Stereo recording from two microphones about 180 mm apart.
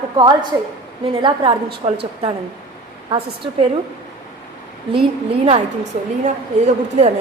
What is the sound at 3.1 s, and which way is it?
Speech, 30° right (ahead or behind).